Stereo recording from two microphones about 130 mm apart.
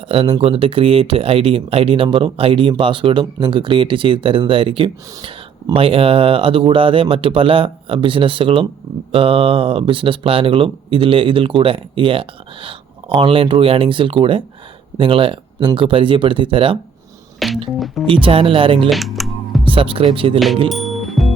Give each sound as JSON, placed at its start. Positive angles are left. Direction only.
{"t": 0.1, "sound": "speech", "side_deg": -45}
{"t": 17.4, "sound": "music", "side_deg": 0}
{"t": 17.7, "sound": "speech", "side_deg": 0}
{"t": 18.0, "sound": "speech", "side_deg": -45}
{"t": 18.9, "sound": "computer keyboard", "side_deg": 0}
{"t": 19.6, "sound": "speech", "side_deg": -45}
{"t": 20.7, "sound": "music", "side_deg": 0}